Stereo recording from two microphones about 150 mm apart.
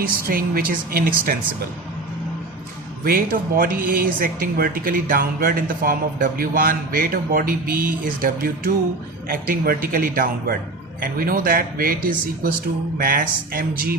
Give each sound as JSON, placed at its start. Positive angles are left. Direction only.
{"t": 0.0, "sound": "speech", "side_deg": -75}
{"t": 3.0, "sound": "speech", "side_deg": -75}
{"t": 11.0, "sound": "speech", "side_deg": -70}